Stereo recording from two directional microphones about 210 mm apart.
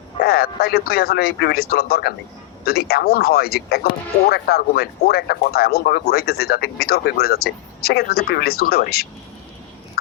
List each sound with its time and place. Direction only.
0.2 s speech: 50° left (ahead or behind)